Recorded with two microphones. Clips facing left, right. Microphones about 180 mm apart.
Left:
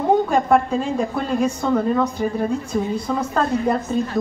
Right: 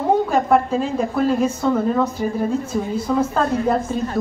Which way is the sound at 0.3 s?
Centre (ahead or behind).